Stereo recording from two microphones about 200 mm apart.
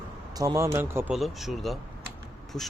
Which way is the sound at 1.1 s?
Centre (ahead or behind).